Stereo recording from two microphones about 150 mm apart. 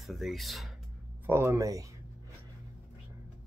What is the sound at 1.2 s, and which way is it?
Speech, 15° right (ahead or behind).